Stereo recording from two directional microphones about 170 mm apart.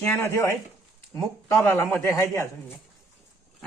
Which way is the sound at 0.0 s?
15° left (ahead or behind).